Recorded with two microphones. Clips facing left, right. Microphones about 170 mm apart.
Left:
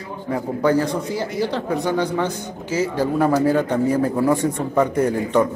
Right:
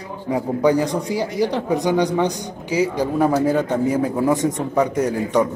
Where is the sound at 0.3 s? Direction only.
15° right (ahead or behind).